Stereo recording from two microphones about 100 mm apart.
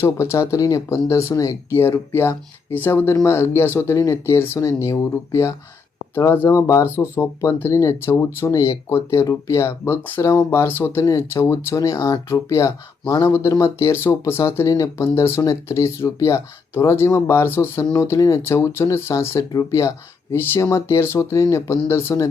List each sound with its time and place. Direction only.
0.0 s speech: 25° left (ahead or behind)